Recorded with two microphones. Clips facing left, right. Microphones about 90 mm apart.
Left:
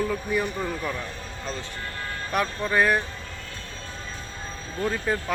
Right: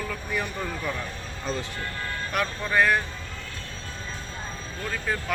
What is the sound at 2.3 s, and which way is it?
Speech, 30° left (ahead or behind).